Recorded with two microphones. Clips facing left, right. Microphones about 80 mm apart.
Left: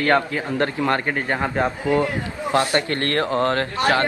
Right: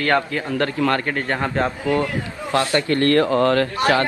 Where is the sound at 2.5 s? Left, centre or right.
Left.